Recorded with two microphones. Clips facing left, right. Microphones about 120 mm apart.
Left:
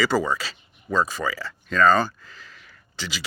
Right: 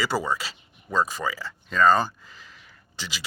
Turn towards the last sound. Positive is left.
turn(degrees=-15)  # may be behind; listen again after turning